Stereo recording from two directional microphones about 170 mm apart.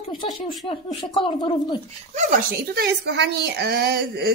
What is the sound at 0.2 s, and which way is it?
Speech, 25° left (ahead or behind).